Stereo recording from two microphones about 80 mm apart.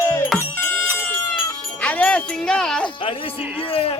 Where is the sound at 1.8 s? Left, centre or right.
Centre.